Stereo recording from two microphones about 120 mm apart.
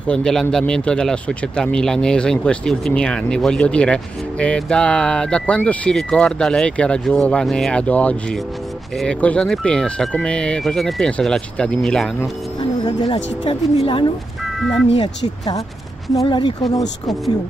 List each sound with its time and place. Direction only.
0.0 s speech: 5° left (ahead or behind)
12.8 s speech: 40° left (ahead or behind)
15.0 s speech: 35° left (ahead or behind)